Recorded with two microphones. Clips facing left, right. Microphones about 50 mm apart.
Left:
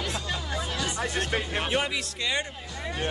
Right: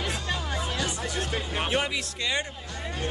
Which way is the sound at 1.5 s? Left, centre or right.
Centre.